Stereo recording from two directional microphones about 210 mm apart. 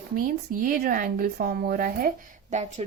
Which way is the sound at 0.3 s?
40° right (ahead or behind).